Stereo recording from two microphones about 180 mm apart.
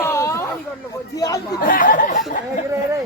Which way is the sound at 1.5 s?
50° left (ahead or behind).